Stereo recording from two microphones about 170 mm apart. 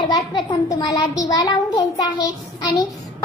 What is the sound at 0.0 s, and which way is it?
Child singing, 25° left (ahead or behind).